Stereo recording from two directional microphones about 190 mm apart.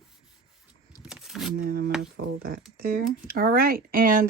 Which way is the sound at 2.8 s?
50° right (ahead or behind).